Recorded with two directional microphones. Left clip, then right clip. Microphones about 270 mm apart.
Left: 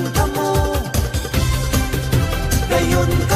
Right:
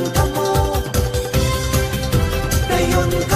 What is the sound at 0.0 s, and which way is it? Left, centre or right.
Music, centre.